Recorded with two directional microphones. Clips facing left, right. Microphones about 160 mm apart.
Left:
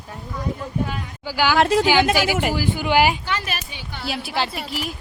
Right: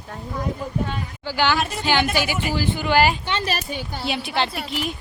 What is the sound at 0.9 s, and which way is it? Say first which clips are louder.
Speech: right 1 dB; 10° left (ahead or behind).